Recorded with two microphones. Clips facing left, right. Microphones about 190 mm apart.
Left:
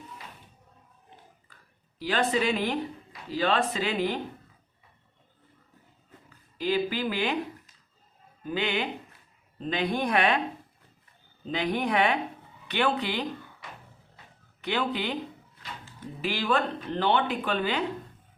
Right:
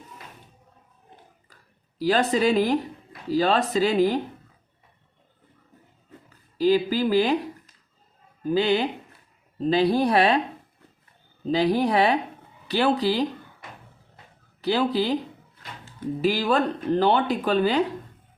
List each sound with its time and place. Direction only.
2.0 s speech: 40° right (ahead or behind)
6.6 s speech: 35° right (ahead or behind)
8.4 s speech: 35° right (ahead or behind)
11.4 s speech: 35° right (ahead or behind)
14.6 s speech: 35° right (ahead or behind)
16.2 s speech: 40° right (ahead or behind)